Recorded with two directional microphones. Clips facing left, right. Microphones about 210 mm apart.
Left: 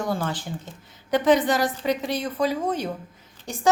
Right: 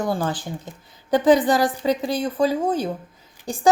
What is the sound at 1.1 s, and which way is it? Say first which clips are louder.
A woman's voice: right 3 dB; 35° right (ahead or behind).